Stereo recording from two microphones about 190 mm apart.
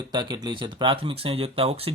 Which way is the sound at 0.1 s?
25° right (ahead or behind).